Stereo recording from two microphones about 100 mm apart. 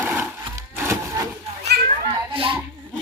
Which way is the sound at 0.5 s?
30° right (ahead or behind).